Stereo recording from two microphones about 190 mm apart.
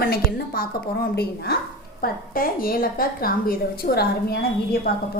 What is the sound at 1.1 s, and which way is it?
A woman's voice, 55° left (ahead or behind).